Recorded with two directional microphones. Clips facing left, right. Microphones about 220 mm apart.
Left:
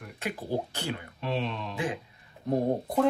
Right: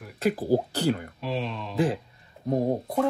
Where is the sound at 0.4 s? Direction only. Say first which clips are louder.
Right 8 dB; 40° right (ahead or behind).